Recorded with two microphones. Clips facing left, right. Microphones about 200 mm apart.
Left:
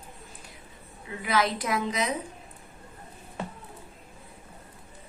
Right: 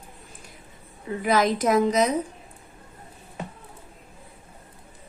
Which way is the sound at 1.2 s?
45° right (ahead or behind).